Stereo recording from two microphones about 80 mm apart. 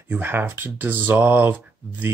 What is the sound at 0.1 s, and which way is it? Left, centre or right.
Speech, right.